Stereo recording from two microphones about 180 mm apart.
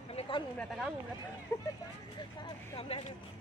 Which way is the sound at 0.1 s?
35° left (ahead or behind).